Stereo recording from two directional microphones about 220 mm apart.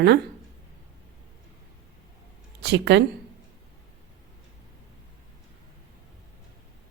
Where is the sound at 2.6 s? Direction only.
50° right (ahead or behind).